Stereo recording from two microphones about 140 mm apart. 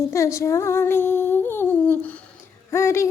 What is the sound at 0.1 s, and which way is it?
Female singing, 20° left (ahead or behind).